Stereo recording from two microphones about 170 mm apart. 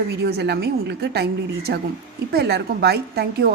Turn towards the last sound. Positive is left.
turn(degrees=-70)  # may be behind; listen again after turning